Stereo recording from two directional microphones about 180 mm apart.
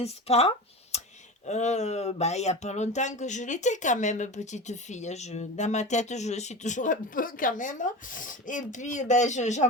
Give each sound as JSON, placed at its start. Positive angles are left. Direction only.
{"t": 0.0, "sound": "speech", "side_deg": 35}
{"t": 0.9, "sound": "clicking", "side_deg": 35}
{"t": 1.5, "sound": "speech", "side_deg": 40}